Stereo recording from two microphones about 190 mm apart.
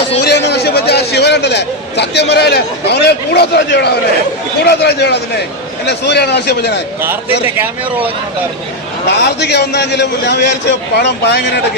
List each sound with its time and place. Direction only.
0.2 s a sound: 65° left (ahead or behind)
2.3 s a man's voice: 60° left (ahead or behind)
7.4 s speech: 10° right (ahead or behind)
9.0 s a man's voice: 65° left (ahead or behind)